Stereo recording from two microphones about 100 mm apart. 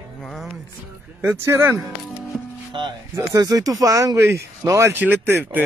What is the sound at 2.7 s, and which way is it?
Speech, 55° right (ahead or behind).